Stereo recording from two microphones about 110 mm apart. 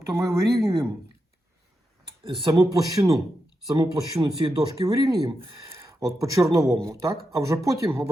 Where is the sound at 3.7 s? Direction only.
45° right (ahead or behind).